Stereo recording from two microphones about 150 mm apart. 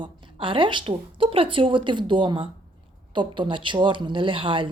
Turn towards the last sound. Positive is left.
turn(degrees=-35)  # may be behind; listen again after turning